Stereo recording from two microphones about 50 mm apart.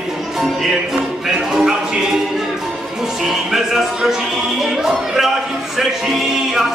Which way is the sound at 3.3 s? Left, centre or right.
Centre.